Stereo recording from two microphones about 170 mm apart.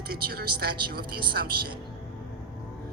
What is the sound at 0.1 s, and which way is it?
A woman's voice, 65° right (ahead or behind).